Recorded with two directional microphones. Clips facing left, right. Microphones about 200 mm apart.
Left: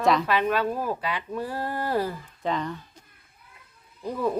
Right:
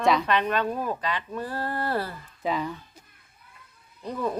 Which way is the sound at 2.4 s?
5° right (ahead or behind).